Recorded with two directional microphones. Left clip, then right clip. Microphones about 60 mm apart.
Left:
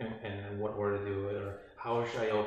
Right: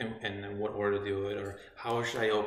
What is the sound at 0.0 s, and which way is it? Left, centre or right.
Speech, right.